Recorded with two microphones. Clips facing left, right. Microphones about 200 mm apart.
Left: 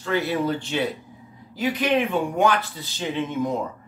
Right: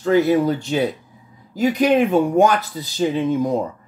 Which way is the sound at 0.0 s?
45° right (ahead or behind).